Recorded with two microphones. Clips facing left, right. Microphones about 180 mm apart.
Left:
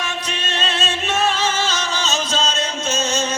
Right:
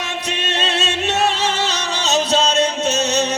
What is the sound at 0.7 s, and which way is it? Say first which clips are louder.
Music: right 1 dB; 70° right (ahead or behind).